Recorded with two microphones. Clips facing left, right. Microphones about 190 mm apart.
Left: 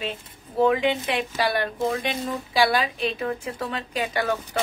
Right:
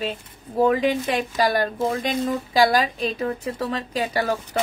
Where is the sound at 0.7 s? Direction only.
40° right (ahead or behind).